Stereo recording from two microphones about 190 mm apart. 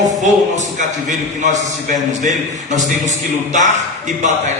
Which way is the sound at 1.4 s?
40° right (ahead or behind).